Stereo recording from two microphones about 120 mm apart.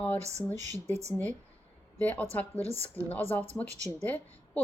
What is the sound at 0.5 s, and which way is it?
Speech, 75° right (ahead or behind).